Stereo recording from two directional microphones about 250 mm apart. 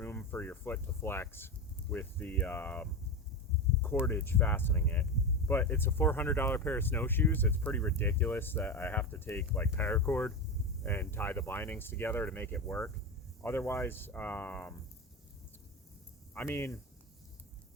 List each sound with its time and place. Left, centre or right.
0.0 s speech: centre
4.0 s speech: centre
16.3 s speech: centre